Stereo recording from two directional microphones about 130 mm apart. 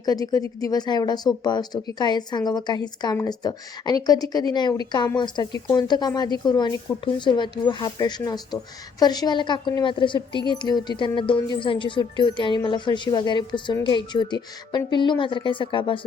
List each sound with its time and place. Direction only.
0.0 s a woman's voice: 30° left (ahead or behind)